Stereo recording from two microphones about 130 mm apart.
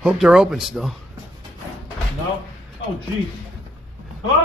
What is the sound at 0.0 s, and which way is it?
Speech, 5° right (ahead or behind).